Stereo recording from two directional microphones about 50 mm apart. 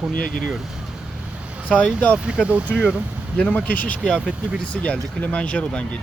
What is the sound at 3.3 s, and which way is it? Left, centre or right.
Speech, left.